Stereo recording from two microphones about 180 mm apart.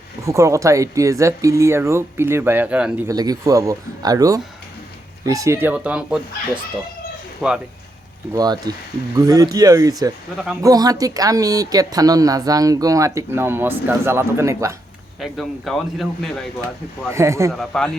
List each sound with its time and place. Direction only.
0.3 s speech: 15° right (ahead or behind)
3.1 s speech: 20° right (ahead or behind)
7.4 s speech: centre (ahead or behind)
8.4 s speech: 20° right (ahead or behind)
10.3 s speech: 5° right (ahead or behind)
10.6 s speech: 20° right (ahead or behind)
15.2 s speech: centre (ahead or behind)
17.1 s speech: 15° right (ahead or behind)
17.5 s speech: 5° left (ahead or behind)